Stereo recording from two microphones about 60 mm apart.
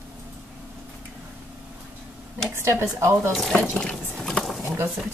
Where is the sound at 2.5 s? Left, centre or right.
Right.